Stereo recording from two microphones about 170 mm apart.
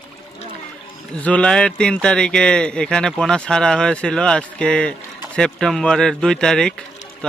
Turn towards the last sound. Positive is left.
turn(degrees=5)  # may be behind; listen again after turning